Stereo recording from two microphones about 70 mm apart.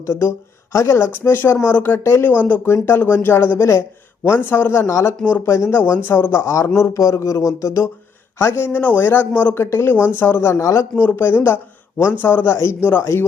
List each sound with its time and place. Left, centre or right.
0.0 s speech: left
2.4 s speech: left
4.9 s speech: left
8.4 s speech: left
9.6 s speech: left
9.9 s speech: left
10.6 s speech: left
10.9 s speech: left